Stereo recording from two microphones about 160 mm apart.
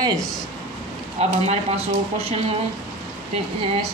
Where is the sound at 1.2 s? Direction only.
40° right (ahead or behind).